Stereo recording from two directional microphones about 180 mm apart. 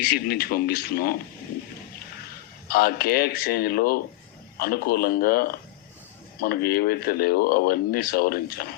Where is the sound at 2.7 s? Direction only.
55° left (ahead or behind).